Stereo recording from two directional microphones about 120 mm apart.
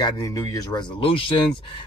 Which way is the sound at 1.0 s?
45° left (ahead or behind).